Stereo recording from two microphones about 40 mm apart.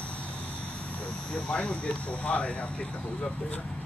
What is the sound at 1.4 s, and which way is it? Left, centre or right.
Speech, left.